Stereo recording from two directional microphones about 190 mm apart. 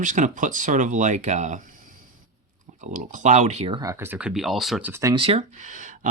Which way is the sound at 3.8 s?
15° right (ahead or behind).